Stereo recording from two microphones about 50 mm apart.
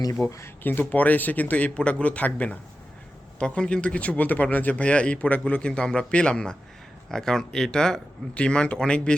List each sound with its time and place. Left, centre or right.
0.3 s speech: left
0.6 s speech: left
0.9 s speech: left